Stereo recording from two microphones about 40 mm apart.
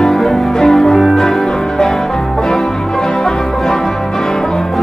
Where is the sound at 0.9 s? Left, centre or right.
Centre.